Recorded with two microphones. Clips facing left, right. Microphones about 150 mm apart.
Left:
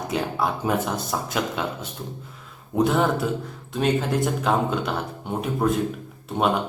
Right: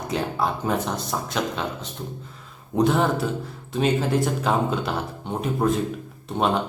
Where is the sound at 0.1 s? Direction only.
Centre (ahead or behind).